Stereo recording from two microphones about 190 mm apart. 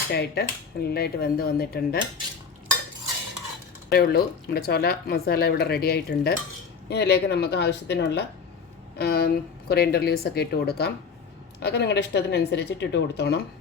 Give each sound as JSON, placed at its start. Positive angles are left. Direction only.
{"t": 0.1, "sound": "speech", "side_deg": 55}
{"t": 3.8, "sound": "speech", "side_deg": 55}